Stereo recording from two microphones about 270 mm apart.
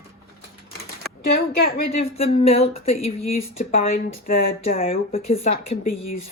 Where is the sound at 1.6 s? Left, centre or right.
Left.